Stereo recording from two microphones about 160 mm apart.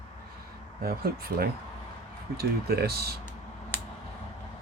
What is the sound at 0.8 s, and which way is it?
Speech, 70° right (ahead or behind).